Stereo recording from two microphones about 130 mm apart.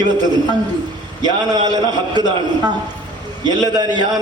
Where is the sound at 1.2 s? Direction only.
30° right (ahead or behind).